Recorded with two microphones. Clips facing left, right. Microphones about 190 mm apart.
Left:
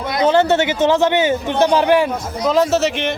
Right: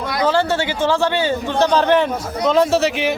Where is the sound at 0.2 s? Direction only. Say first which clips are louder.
Left 4 dB; 20° left (ahead or behind).